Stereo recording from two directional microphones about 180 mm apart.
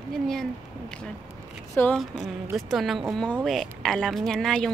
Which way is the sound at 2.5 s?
Centre (ahead or behind).